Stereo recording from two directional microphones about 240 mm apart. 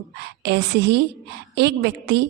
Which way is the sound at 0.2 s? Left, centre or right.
Right.